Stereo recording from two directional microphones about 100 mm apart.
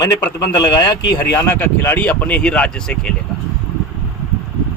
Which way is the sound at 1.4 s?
25° left (ahead or behind).